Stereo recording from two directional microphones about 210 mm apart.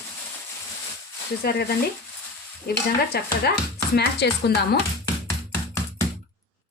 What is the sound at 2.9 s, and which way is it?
Speech, 50° left (ahead or behind).